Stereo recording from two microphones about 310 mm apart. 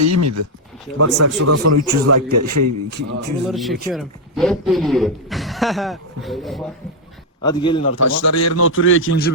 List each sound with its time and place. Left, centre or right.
0.0 s a man's voice: right
3.5 s speech: centre
7.4 s a man's voice: centre
7.9 s a man's voice: left